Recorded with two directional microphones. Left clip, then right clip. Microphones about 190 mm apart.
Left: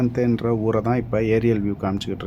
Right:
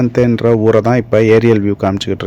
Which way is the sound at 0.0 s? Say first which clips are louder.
Right 10 dB; 35° right (ahead or behind).